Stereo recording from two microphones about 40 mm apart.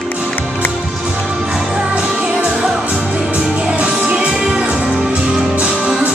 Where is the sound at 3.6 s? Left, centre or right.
Right.